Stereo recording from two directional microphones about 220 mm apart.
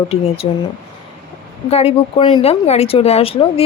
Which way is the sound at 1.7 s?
25° left (ahead or behind).